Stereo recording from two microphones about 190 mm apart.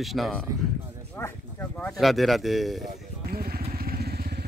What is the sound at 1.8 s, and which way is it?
Speech, centre (ahead or behind).